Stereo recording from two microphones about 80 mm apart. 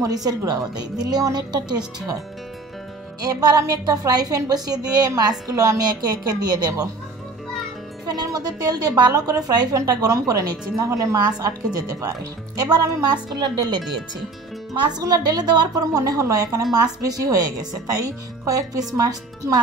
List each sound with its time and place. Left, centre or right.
0.0 s a woman's voice: right
3.2 s a woman's voice: right
8.1 s a woman's voice: right
10.9 s a woman's voice: right